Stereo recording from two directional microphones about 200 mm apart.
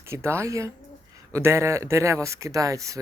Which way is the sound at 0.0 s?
15° right (ahead or behind).